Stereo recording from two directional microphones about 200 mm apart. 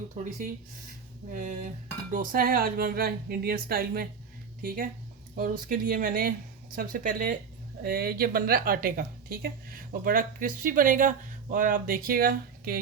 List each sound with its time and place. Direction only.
1.3 s speech: 35° right (ahead or behind)